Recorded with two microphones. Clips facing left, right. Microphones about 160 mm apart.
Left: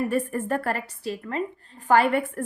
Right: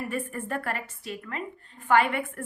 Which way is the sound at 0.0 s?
40° left (ahead or behind).